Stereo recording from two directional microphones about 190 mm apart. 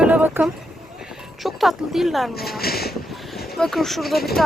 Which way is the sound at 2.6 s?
55° left (ahead or behind).